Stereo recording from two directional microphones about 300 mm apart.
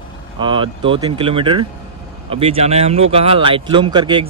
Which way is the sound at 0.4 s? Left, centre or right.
Centre.